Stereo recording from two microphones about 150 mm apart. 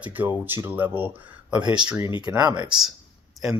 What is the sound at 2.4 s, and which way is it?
Speech, 30° right (ahead or behind).